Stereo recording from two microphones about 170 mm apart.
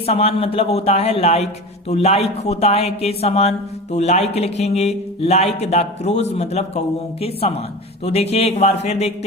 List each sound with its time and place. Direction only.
0.0 s speech: 35° left (ahead or behind)